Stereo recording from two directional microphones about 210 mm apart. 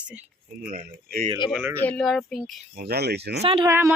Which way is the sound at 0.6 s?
40° right (ahead or behind).